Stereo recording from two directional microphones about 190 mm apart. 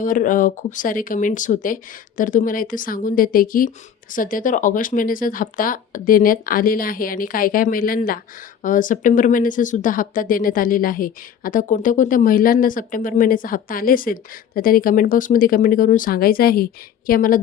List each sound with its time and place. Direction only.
0.0 s speech: 45° left (ahead or behind)